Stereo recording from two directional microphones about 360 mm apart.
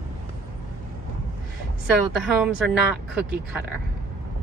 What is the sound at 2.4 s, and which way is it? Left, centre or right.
Speech, centre.